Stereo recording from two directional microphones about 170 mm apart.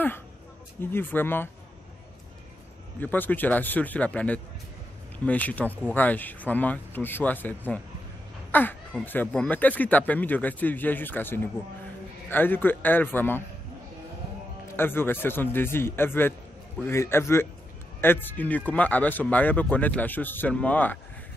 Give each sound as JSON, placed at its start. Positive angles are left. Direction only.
{"t": 0.7, "sound": "speech", "side_deg": 15}
{"t": 3.0, "sound": "speech", "side_deg": 10}
{"t": 14.8, "sound": "speech", "side_deg": 15}